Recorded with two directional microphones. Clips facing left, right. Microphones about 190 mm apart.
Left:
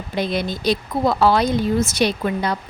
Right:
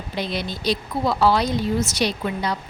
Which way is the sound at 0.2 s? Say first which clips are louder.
Left 5 dB; 50° left (ahead or behind).